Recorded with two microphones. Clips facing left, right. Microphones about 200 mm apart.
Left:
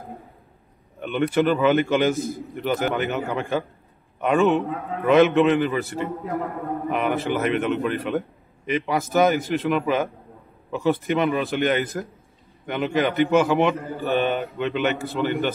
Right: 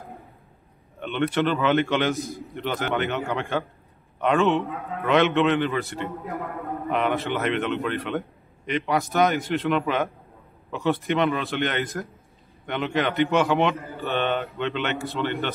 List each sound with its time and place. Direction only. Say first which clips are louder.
0.9 s a man's voice: left 3 dB; 5° left (ahead or behind)